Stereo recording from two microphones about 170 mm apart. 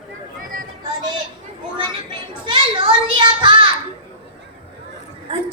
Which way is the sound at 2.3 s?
30° right (ahead or behind).